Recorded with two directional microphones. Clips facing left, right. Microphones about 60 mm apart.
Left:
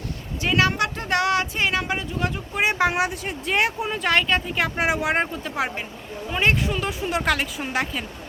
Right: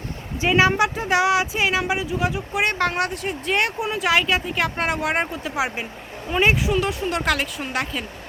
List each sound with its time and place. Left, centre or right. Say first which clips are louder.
0.4 s speech: right 3 dB; centre
2.6 s speech: left 3 dB; centre